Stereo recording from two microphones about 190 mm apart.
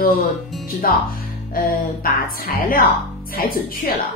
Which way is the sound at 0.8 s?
50° left (ahead or behind).